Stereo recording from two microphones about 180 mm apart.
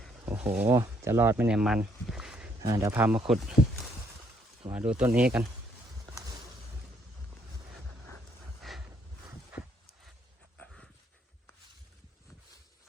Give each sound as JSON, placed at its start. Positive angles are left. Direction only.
{"t": 0.3, "sound": "speech", "side_deg": -5}
{"t": 2.6, "sound": "speech", "side_deg": -20}
{"t": 4.7, "sound": "speech", "side_deg": -5}
{"t": 6.1, "sound": "a sound", "side_deg": -20}
{"t": 8.6, "sound": "a sound", "side_deg": 0}
{"t": 9.5, "sound": "horse", "side_deg": -10}
{"t": 10.6, "sound": "dog", "side_deg": 5}